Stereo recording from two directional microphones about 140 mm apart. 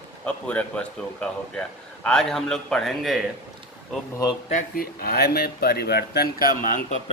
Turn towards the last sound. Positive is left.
turn(degrees=90)